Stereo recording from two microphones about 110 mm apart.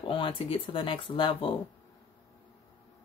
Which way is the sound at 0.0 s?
50° left (ahead or behind).